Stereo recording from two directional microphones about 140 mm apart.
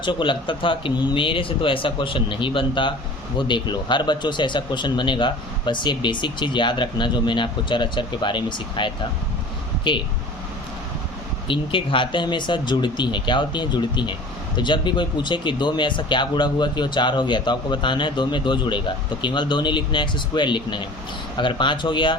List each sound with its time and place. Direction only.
0.0 s speech: 35° left (ahead or behind)
11.4 s speech: 40° left (ahead or behind)